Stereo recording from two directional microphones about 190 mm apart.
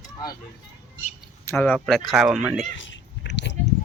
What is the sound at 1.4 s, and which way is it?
Speech, 10° left (ahead or behind).